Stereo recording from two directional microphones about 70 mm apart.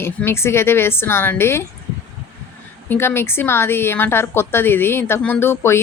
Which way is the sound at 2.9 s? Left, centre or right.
Left.